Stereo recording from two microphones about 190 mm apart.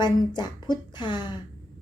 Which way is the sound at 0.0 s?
25° left (ahead or behind).